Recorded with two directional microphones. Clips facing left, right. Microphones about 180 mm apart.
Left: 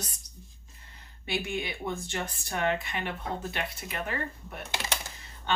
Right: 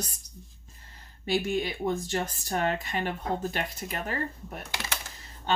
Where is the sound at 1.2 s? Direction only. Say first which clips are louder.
Right 5 dB; 40° right (ahead or behind).